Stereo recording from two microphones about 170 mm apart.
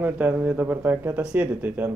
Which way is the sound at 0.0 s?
10° right (ahead or behind).